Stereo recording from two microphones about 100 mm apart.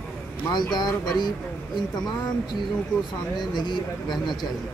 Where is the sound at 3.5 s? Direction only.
45° left (ahead or behind).